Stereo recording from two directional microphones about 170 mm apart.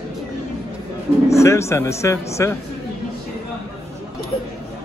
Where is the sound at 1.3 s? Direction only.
15° left (ahead or behind).